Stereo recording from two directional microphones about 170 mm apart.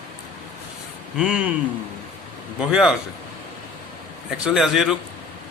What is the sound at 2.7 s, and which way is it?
Speech, 5° right (ahead or behind).